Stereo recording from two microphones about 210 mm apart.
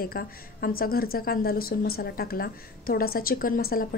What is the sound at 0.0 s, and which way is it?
A woman's voice, 45° left (ahead or behind).